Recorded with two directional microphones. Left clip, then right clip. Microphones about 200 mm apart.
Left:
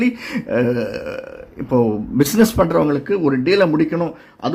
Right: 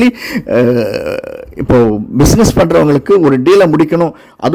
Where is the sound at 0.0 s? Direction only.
35° right (ahead or behind).